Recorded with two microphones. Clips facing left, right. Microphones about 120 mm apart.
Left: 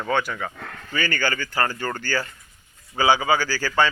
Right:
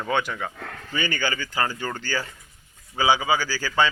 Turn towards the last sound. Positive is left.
turn(degrees=-15)  # may be behind; listen again after turning